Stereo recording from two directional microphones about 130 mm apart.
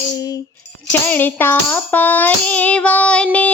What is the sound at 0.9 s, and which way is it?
Child singing, 15° left (ahead or behind).